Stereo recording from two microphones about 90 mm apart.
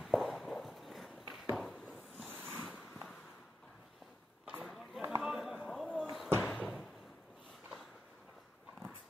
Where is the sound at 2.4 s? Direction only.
25° right (ahead or behind).